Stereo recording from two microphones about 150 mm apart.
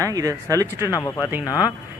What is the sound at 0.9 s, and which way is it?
Speech, 25° left (ahead or behind).